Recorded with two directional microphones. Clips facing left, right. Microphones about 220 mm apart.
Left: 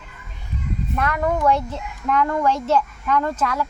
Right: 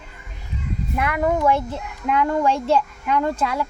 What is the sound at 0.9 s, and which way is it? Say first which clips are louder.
A child's voice: right 1 dB; 10° right (ahead or behind).